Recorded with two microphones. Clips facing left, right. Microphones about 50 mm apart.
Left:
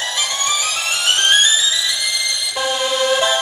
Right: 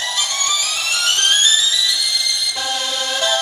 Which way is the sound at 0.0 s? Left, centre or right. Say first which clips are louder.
Left 1 dB; left.